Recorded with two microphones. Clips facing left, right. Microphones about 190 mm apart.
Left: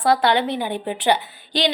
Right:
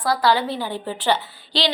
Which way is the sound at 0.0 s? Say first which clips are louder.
Left 2 dB; 25° left (ahead or behind).